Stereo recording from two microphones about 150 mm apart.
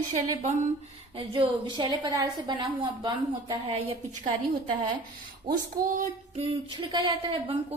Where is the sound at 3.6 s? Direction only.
40° right (ahead or behind).